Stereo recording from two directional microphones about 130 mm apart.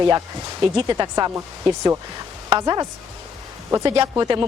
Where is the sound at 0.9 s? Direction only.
30° right (ahead or behind).